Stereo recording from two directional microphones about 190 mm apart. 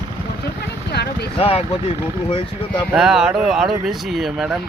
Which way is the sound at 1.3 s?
30° left (ahead or behind).